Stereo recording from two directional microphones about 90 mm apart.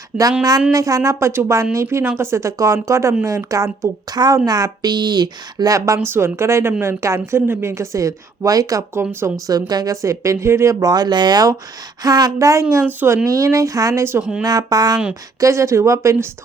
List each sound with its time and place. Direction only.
0.1 s speech: 10° right (ahead or behind)
0.7 s a woman's voice: 40° right (ahead or behind)
12.8 s speech: 20° right (ahead or behind)
13.2 s a woman's voice: 35° right (ahead or behind)
14.2 s speech: 10° right (ahead or behind)
14.4 s a woman's voice: 45° right (ahead or behind)
15.4 s a woman's voice: 35° right (ahead or behind)